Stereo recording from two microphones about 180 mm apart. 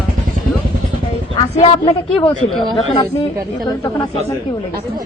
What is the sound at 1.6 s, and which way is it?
Speech, 30° left (ahead or behind).